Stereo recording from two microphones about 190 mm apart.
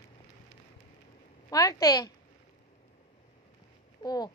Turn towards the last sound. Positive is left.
turn(degrees=20)  # may be behind; listen again after turning